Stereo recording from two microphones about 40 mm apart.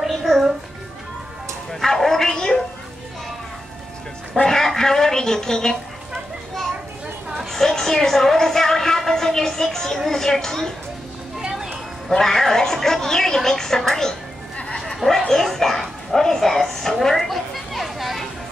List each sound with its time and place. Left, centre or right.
0.0 s music: centre
1.7 s bow-wow: centre
4.3 s a woman's voice: centre
7.3 s a sound: centre
12.1 s speech: centre
17.0 s a sound: centre